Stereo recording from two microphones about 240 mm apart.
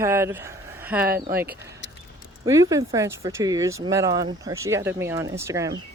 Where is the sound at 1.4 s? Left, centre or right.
Centre.